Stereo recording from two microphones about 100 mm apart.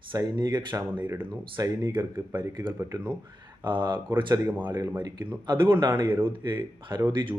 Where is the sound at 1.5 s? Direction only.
35° right (ahead or behind).